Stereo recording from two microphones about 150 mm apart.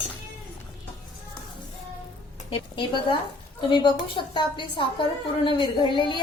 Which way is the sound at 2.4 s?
35° left (ahead or behind).